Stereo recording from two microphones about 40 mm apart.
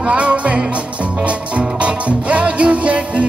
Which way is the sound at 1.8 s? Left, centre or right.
Right.